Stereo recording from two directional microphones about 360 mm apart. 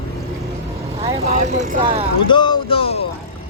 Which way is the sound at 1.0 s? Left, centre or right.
Centre.